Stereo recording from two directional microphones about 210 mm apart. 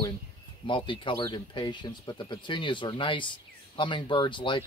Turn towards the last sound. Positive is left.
turn(degrees=25)  # may be behind; listen again after turning